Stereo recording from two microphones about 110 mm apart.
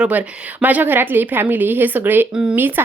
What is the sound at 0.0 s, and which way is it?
Speech, 15° right (ahead or behind).